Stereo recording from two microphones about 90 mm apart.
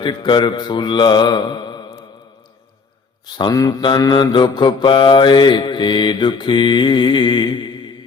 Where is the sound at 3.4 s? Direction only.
45° left (ahead or behind).